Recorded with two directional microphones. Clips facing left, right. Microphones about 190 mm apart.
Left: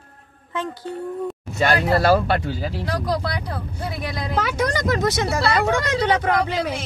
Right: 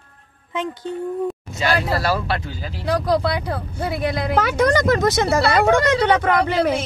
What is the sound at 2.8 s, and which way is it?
Speech, 60° right (ahead or behind).